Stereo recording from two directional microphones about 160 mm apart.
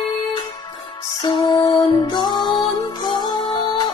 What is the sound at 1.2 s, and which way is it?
Music, 25° left (ahead or behind).